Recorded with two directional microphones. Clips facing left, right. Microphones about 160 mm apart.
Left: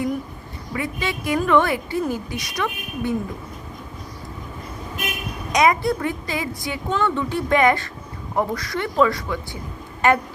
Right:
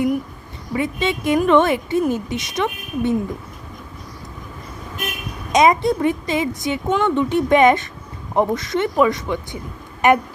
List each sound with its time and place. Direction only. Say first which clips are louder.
0.7 s a woman's voice: right 5 dB; 25° right (ahead or behind)
5.5 s a woman's voice: right 3 dB; 20° right (ahead or behind)